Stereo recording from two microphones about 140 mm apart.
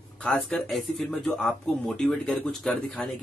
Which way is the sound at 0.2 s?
5° left (ahead or behind).